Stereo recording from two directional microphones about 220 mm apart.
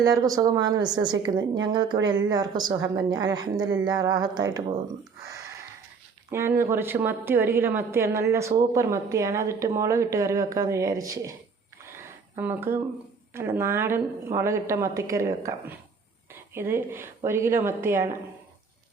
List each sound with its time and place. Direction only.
0.0 s a woman's voice: 15° right (ahead or behind)
6.3 s a woman's voice: 10° right (ahead or behind)
11.9 s a sound: 10° right (ahead or behind)
13.3 s a woman's voice: 10° right (ahead or behind)